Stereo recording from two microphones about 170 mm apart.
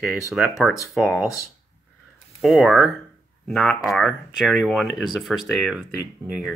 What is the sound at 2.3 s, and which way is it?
Speech, centre (ahead or behind).